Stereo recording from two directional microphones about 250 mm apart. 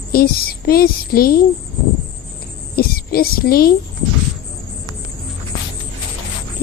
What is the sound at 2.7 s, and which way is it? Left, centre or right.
Speech, left.